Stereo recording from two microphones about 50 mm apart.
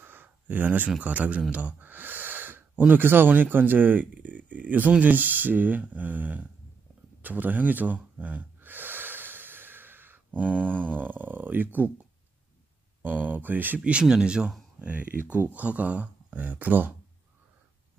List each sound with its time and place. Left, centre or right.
0.0 s a sound: right
1.0 s speech: right
1.5 s a sound: right
2.9 s speech: right
7.2 s gasp: right
10.9 s speech: right
13.0 s speech: right
13.8 s speech: centre
14.8 s speech: right